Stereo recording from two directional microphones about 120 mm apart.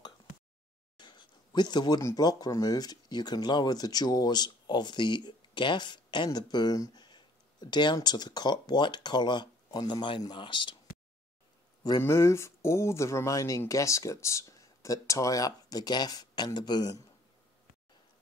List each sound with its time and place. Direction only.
0.9 s speech: 40° left (ahead or behind)
12.0 s speech: 20° left (ahead or behind)